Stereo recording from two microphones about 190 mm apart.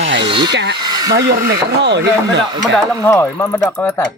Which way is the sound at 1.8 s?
70° right (ahead or behind).